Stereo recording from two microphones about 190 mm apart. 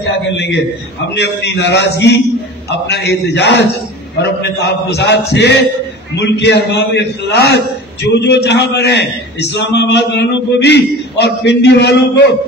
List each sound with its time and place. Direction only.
1.1 s a man's voice: 65° left (ahead or behind)